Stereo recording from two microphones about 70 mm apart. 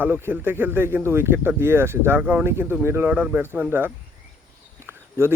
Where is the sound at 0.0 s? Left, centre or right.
Right.